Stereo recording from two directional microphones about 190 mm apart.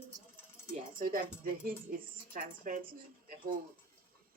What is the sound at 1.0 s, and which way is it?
Music, 50° right (ahead or behind).